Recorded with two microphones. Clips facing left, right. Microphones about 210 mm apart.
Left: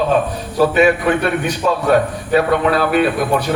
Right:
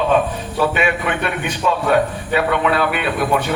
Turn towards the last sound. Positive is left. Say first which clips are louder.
# left 3 dB
turn(degrees=40)  # may be behind; listen again after turning